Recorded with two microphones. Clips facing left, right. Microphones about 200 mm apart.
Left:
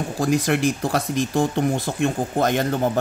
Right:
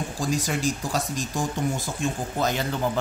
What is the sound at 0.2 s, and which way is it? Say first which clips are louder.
Speech: left 7 dB; 60° left (ahead or behind).